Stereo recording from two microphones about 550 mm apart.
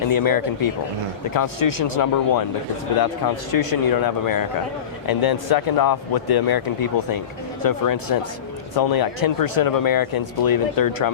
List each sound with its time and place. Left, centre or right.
0.1 s speech: left
3.5 s speech: left
7.6 s speech: left